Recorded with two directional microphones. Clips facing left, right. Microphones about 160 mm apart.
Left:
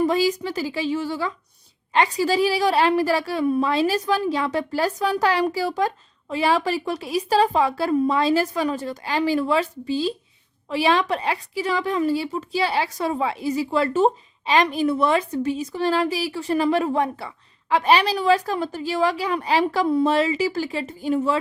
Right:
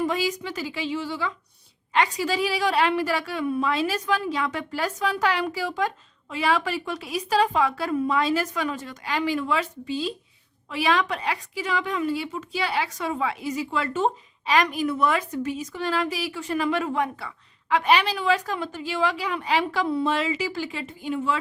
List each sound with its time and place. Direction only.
0.0 s a woman's voice: 35° left (ahead or behind)
1.9 s a woman's voice: 30° left (ahead or behind)